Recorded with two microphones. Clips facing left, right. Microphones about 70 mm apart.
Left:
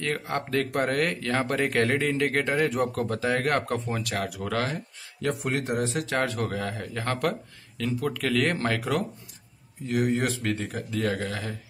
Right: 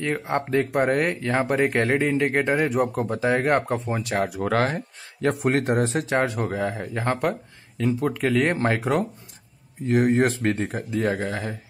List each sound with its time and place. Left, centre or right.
0.0 s speech: centre
0.7 s speech: centre
0.9 s speech: centre; by 6.0 s right
6.0 s speech: centre